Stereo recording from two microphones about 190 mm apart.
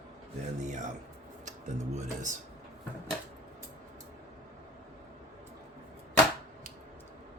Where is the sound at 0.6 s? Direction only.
40° right (ahead or behind).